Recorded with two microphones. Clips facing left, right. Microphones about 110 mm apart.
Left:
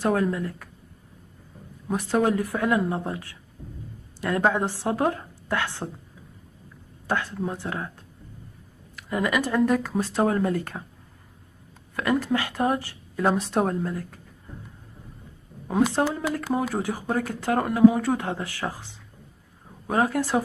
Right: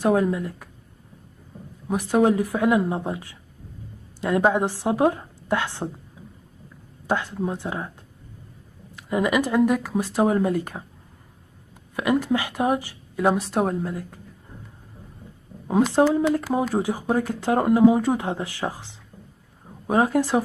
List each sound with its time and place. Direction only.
0.0 s speech: 15° right (ahead or behind)
1.9 s speech: 15° right (ahead or behind)
7.1 s speech: 15° right (ahead or behind)
8.9 s speech: 20° right (ahead or behind)
11.9 s a woman's voice: 15° right (ahead or behind)
13.4 s speech: centre (ahead or behind)
15.9 s speech: 15° right (ahead or behind)